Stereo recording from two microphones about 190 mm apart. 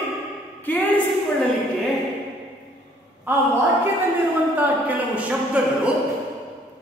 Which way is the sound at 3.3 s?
10° right (ahead or behind).